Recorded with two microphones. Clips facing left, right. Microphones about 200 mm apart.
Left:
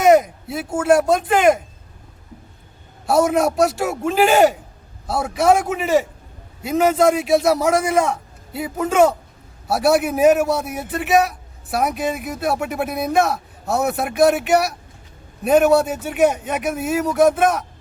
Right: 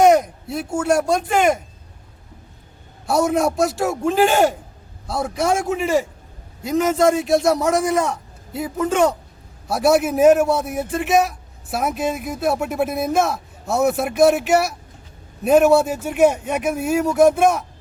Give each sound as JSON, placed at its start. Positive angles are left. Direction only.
{"t": 0.0, "sound": "a sound", "side_deg": 0}
{"t": 0.8, "sound": "speech", "side_deg": 5}
{"t": 3.1, "sound": "speech", "side_deg": 0}